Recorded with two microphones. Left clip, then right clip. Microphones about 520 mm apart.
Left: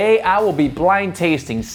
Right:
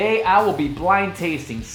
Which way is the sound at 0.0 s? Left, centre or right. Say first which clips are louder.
Left 2 dB; left.